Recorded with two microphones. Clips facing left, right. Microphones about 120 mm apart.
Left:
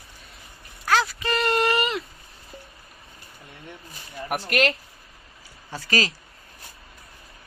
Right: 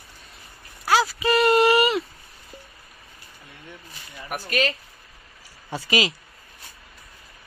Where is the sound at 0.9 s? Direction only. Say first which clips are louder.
Right 3 dB; 5° right (ahead or behind).